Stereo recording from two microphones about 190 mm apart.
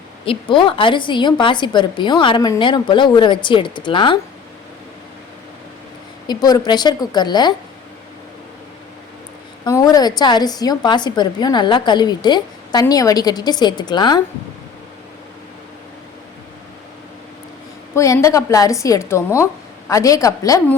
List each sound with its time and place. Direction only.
0.3 s a woman's voice: 25° left (ahead or behind)
6.2 s a woman's voice: 20° left (ahead or behind)
9.6 s a woman's voice: 20° left (ahead or behind)
17.9 s a woman's voice: 15° left (ahead or behind)